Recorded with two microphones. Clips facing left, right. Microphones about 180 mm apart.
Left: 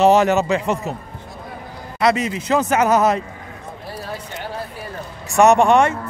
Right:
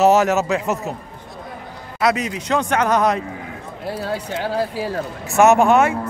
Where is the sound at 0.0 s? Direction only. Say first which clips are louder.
Left 1 dB; centre (ahead or behind).